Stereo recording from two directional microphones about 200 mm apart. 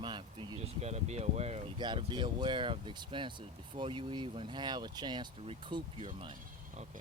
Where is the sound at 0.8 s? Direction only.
35° right (ahead or behind).